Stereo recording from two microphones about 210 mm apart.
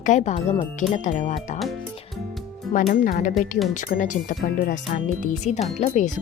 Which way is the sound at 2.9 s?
40° left (ahead or behind).